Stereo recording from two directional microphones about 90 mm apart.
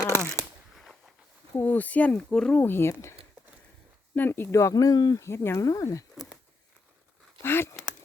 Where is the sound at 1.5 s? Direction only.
20° left (ahead or behind).